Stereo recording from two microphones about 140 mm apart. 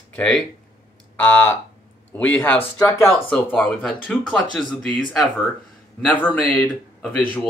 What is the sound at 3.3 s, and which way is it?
Speech, 10° left (ahead or behind).